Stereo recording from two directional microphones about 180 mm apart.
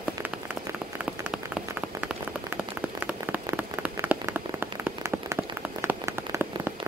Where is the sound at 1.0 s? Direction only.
5° right (ahead or behind).